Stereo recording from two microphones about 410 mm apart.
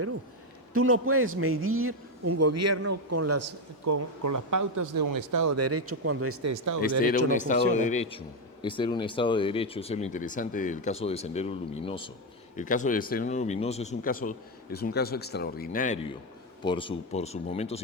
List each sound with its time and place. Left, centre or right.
0.7 s speech: right
7.0 s speech: centre